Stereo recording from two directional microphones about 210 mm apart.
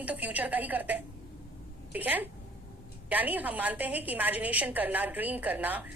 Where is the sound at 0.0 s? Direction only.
5° right (ahead or behind).